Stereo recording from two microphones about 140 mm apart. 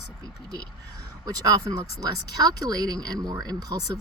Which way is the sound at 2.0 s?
25° right (ahead or behind).